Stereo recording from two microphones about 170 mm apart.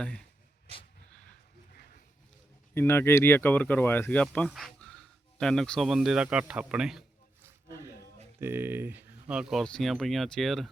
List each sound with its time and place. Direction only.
0.0 s speech: 5° left (ahead or behind)
1.7 s a sound: 65° left (ahead or behind)
2.7 s speech: 15° left (ahead or behind); by 7.0 s 5° right (ahead or behind)
8.4 s speech: 15° right (ahead or behind)